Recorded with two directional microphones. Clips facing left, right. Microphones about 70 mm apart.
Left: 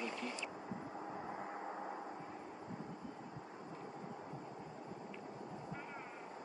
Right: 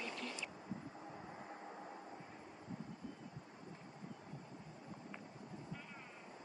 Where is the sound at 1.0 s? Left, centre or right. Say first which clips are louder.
Left 6 dB; left.